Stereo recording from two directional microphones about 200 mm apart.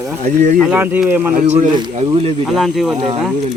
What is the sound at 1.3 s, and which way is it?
Speech, 35° right (ahead or behind).